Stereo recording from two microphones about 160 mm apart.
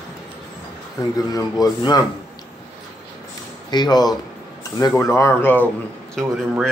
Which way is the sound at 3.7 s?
25° left (ahead or behind).